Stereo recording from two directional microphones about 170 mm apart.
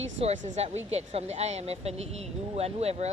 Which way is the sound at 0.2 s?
40° right (ahead or behind).